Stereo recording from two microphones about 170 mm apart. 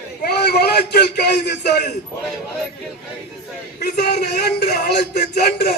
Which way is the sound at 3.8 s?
75° left (ahead or behind).